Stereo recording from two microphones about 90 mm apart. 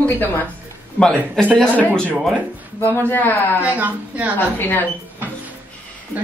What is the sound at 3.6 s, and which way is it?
Speech, 15° right (ahead or behind).